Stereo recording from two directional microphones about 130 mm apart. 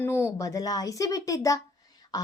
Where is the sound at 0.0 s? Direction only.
20° left (ahead or behind).